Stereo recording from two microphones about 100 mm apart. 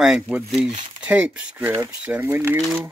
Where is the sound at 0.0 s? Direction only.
5° right (ahead or behind); by 2.6 s 20° right (ahead or behind).